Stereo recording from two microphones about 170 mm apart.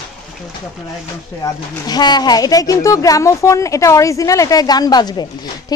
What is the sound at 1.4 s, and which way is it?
Speech, 25° left (ahead or behind).